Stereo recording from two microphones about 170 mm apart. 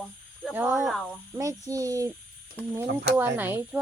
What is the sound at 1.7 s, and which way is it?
Speech, 20° right (ahead or behind).